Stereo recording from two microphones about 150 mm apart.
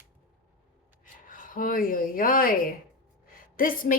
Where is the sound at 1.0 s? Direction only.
65° left (ahead or behind).